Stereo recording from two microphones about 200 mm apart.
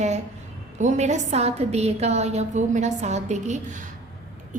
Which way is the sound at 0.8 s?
35° right (ahead or behind).